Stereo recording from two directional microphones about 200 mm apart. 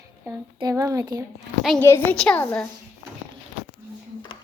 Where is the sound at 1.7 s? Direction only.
10° left (ahead or behind).